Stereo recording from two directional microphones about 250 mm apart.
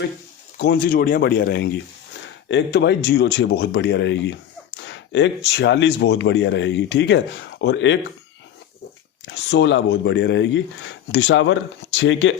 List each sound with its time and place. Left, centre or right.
0.6 s speech: left
9.2 s speech: left